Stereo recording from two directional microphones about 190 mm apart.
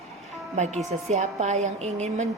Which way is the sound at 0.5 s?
35° right (ahead or behind).